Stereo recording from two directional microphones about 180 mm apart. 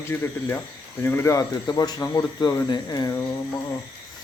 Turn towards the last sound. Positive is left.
turn(degrees=20)  # may be behind; listen again after turning